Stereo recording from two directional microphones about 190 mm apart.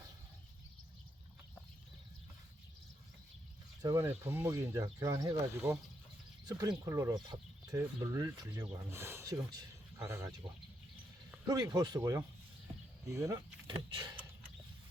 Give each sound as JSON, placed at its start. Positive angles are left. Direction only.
{"t": 3.8, "sound": "speech", "side_deg": -10}
{"t": 11.4, "sound": "speech", "side_deg": -20}